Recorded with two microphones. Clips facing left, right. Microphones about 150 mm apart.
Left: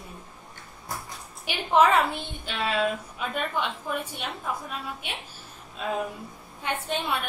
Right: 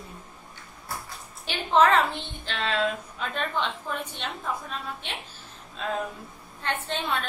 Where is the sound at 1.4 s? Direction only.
10° left (ahead or behind).